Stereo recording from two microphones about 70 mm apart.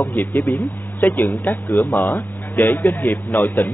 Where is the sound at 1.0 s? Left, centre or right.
Left.